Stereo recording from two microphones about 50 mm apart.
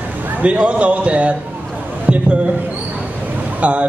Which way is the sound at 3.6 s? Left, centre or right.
Right.